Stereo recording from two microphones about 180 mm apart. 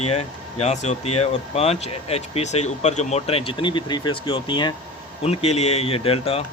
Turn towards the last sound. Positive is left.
turn(degrees=35)  # may be behind; listen again after turning